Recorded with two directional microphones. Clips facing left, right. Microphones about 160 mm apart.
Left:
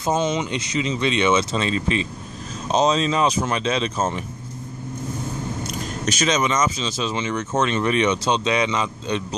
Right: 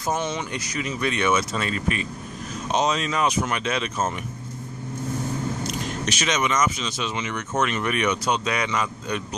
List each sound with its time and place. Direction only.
0.0 s speech: 20° left (ahead or behind)
6.1 s speech: 30° left (ahead or behind)